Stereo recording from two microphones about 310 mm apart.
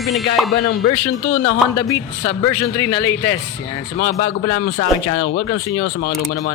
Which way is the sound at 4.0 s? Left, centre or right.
Left.